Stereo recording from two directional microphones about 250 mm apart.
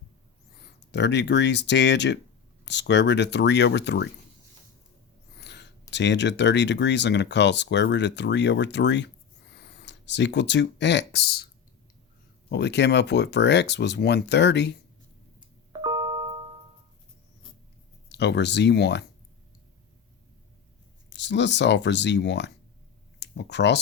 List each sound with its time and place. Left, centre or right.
0.9 s speech: left
5.4 s a sound: left
5.9 s speech: left
12.5 s speech: left
15.7 s a sound: centre
18.1 s speech: left
21.1 s speech: left